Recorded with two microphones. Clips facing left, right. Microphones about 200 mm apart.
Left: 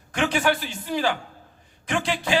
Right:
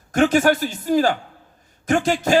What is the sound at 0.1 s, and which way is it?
Speech, 45° right (ahead or behind).